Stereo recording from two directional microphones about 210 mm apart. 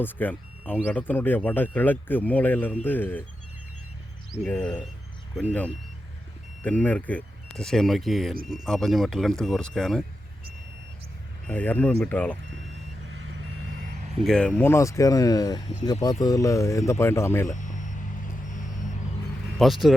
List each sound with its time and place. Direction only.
0.0 s speech: 10° left (ahead or behind)
4.4 s speech: 10° left (ahead or behind)
11.4 s speech: 10° left (ahead or behind)
13.1 s reversing beeps: 70° right (ahead or behind)
14.3 s speech: 5° left (ahead or behind)
17.5 s music: 35° left (ahead or behind)
19.5 s speech: centre (ahead or behind)